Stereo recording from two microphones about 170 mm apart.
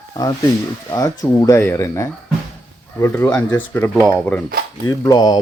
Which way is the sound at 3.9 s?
Centre (ahead or behind).